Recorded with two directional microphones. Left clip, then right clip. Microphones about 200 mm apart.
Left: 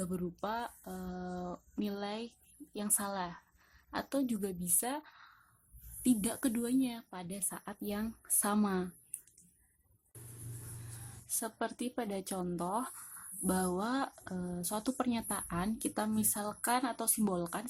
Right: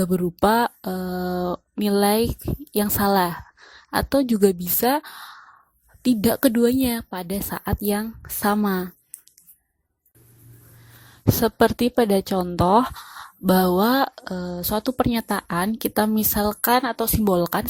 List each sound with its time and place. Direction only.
0.0 s speech: 40° right (ahead or behind)
11.3 s speech: 40° right (ahead or behind)